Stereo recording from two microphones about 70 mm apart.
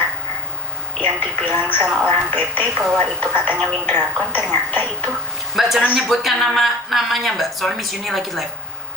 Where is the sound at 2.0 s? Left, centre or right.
Left.